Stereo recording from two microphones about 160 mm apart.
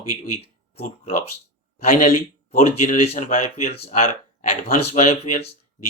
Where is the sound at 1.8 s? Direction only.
50° left (ahead or behind).